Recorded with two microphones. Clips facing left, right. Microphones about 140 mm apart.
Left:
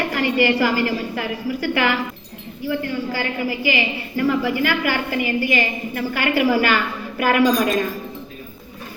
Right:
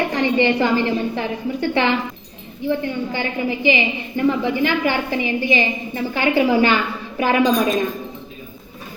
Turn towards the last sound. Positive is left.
turn(degrees=-20)  # may be behind; listen again after turning